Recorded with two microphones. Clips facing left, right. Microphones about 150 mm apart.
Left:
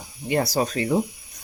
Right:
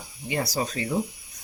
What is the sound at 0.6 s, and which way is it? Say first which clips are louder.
Speech: left 5 dB; 65° left (ahead or behind).